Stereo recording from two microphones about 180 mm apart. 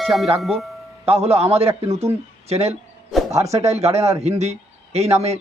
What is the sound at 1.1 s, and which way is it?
Speech, 35° right (ahead or behind).